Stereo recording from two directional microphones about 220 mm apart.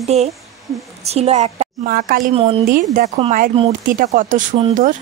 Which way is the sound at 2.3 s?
25° right (ahead or behind).